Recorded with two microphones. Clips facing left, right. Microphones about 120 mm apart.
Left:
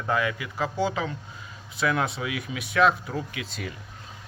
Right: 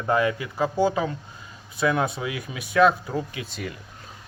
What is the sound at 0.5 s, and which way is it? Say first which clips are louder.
Speech: right 4 dB; 15° right (ahead or behind).